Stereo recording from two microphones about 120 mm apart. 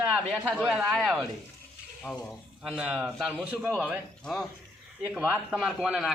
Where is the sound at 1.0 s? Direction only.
5° right (ahead or behind).